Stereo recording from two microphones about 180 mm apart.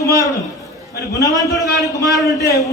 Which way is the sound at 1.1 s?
20° left (ahead or behind).